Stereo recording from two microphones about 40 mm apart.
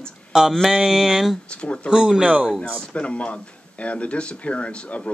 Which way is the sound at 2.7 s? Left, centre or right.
Left.